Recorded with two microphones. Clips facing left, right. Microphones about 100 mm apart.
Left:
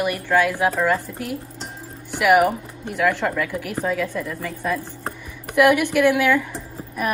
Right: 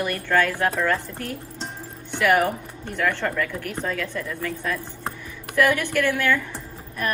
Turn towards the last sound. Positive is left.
turn(degrees=5)  # may be behind; listen again after turning